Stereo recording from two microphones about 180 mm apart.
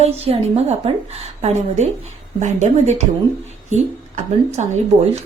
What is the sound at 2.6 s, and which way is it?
Speech, 40° right (ahead or behind).